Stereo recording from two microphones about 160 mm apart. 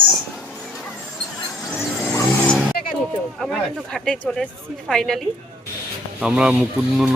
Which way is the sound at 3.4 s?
5° left (ahead or behind).